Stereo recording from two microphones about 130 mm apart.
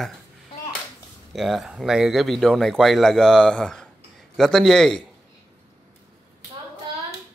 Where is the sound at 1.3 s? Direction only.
Centre (ahead or behind).